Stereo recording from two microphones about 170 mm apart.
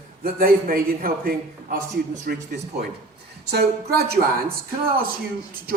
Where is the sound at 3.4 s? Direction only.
70° right (ahead or behind).